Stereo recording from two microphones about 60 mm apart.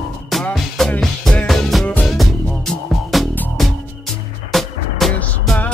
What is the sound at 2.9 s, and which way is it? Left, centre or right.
Music, centre.